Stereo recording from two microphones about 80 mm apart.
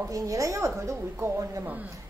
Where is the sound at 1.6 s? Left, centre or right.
Centre.